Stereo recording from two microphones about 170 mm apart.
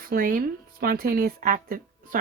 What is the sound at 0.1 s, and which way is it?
Speech, 55° right (ahead or behind).